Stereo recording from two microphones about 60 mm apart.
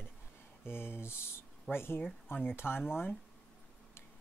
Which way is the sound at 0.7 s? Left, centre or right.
Left.